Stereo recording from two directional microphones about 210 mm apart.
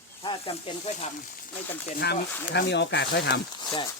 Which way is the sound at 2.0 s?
50° left (ahead or behind).